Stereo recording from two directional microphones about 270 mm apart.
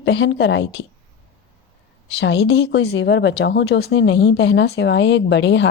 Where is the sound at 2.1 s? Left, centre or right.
Left.